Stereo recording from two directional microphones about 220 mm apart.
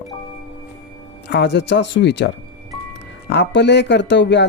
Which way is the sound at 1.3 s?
50° left (ahead or behind).